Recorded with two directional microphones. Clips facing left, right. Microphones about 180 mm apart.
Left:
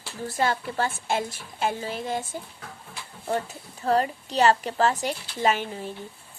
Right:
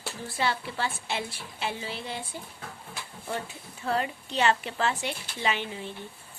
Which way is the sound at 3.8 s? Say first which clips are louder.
Left 6 dB; 40° left (ahead or behind).